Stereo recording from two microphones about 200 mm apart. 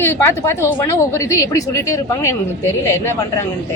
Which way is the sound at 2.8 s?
10° left (ahead or behind).